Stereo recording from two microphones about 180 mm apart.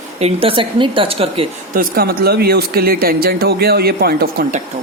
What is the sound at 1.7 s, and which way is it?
Speech, 55° right (ahead or behind).